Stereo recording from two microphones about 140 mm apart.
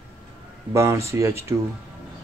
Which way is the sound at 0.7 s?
20° right (ahead or behind).